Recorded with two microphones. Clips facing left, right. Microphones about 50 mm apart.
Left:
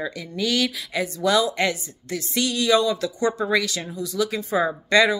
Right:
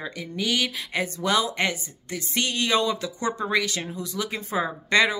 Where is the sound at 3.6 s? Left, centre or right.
Right.